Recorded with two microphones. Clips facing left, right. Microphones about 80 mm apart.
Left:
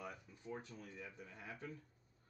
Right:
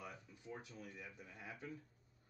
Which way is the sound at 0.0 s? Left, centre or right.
Left.